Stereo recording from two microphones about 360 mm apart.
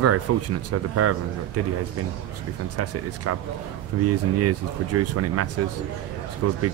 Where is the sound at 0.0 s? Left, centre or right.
Right.